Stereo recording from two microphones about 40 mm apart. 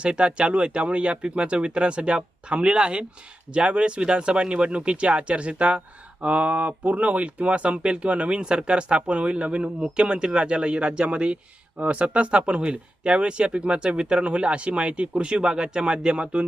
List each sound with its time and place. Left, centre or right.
0.0 s speech: right